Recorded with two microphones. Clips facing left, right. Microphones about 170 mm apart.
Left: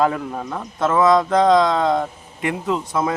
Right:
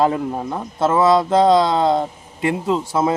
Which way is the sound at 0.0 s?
25° right (ahead or behind).